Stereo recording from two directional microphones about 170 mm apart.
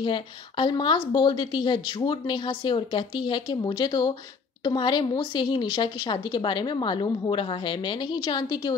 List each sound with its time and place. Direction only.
0.0 s a woman's voice: 30° left (ahead or behind)